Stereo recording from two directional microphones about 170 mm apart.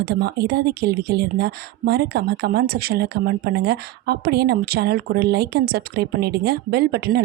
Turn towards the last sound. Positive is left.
turn(degrees=-65)  # may be behind; listen again after turning